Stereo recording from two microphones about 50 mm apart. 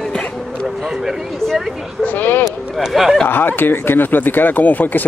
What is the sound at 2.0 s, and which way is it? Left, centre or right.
Sheep, left.